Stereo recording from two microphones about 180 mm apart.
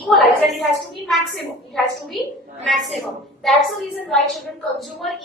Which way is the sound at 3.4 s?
Centre (ahead or behind).